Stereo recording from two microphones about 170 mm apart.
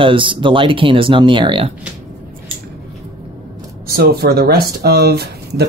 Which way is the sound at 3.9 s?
70° right (ahead or behind).